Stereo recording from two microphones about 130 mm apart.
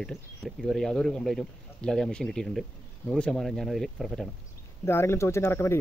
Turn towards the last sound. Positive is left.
turn(degrees=20)  # may be behind; listen again after turning